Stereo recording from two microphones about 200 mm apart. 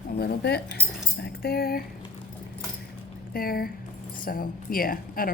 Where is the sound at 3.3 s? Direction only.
45° left (ahead or behind).